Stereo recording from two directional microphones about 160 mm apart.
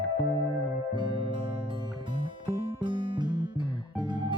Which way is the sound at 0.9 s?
30° right (ahead or behind).